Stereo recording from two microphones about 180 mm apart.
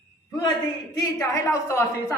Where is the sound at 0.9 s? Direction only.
20° left (ahead or behind).